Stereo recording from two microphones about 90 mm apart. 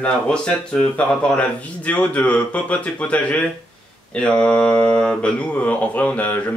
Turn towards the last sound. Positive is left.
turn(degrees=20)  # may be behind; listen again after turning